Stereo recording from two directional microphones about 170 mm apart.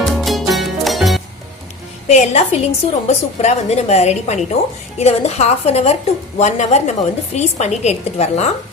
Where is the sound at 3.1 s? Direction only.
40° left (ahead or behind).